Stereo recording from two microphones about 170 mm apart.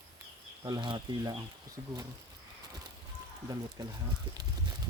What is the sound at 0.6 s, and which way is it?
Speech, 25° right (ahead or behind).